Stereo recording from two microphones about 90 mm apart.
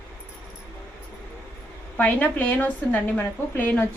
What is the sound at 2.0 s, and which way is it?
A woman's voice, 20° left (ahead or behind).